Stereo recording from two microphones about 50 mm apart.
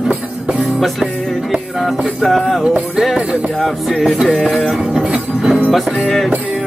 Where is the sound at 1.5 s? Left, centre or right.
Centre.